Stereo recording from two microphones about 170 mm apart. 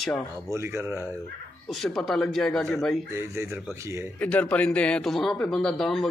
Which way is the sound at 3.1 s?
15° right (ahead or behind).